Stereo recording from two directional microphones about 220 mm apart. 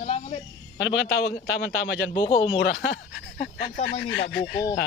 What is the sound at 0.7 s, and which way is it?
A man's voice, 55° left (ahead or behind).